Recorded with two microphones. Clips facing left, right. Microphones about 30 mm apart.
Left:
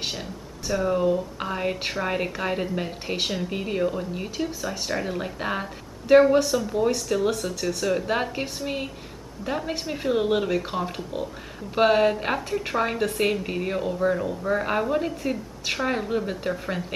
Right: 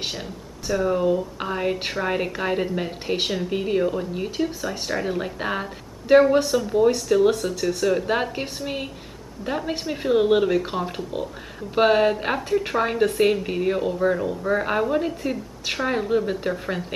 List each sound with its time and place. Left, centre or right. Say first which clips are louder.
0.0 s a woman's voice: right 1 dB; centre